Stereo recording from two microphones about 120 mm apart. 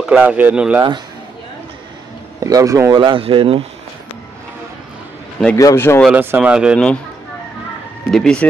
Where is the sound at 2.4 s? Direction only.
30° right (ahead or behind).